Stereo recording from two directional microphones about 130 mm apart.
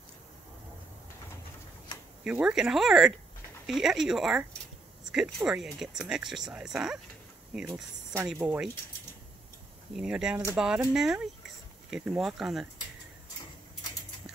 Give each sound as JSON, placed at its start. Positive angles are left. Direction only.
{"t": 2.2, "sound": "speech", "side_deg": -5}
{"t": 7.6, "sound": "speech", "side_deg": -20}
{"t": 8.3, "sound": "speech", "side_deg": -5}
{"t": 9.9, "sound": "speech", "side_deg": -5}